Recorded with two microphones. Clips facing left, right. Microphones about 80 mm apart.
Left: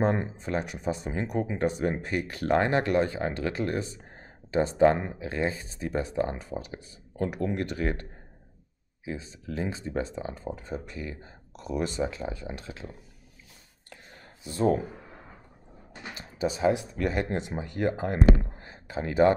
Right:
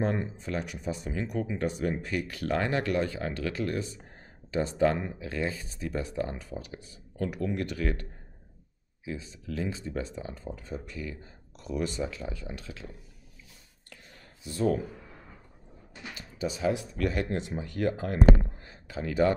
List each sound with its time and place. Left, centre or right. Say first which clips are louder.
0.0 s speech: left 3 dB; left
14.4 s speech: left 3 dB; left